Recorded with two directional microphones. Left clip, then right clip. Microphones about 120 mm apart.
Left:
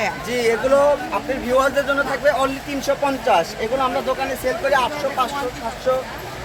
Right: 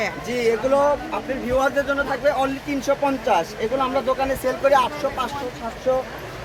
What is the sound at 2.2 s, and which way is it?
Speech, 15° right (ahead or behind).